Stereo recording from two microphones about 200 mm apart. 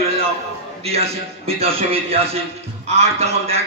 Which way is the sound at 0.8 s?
30° right (ahead or behind).